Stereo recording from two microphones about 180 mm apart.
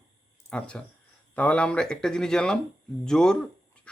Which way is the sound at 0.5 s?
5° left (ahead or behind).